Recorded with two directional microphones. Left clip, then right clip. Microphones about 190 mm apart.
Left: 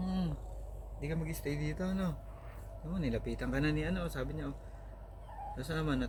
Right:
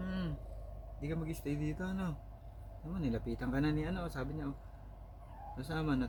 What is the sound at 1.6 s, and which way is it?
Speech, 10° right (ahead or behind).